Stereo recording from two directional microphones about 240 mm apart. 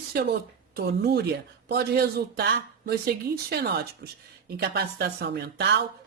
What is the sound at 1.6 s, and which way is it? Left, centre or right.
A woman's voice, right.